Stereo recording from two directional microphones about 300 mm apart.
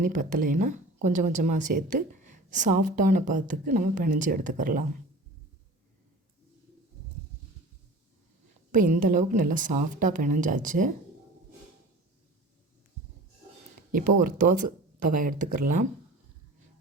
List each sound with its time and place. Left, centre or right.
0.0 s speech: right
8.7 s speech: right
13.9 s speech: right
14.4 s speech: right